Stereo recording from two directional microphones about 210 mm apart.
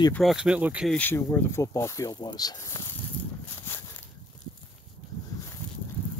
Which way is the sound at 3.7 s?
10° left (ahead or behind).